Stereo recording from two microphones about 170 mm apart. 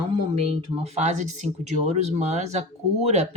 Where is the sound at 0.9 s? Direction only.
45° right (ahead or behind).